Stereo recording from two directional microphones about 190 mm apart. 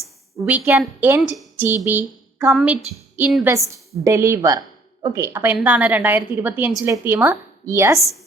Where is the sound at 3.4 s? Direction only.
15° right (ahead or behind).